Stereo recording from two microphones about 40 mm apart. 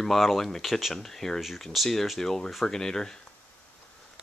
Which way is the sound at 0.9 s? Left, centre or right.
Centre.